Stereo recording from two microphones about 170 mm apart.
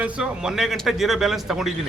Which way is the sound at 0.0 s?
5° right (ahead or behind).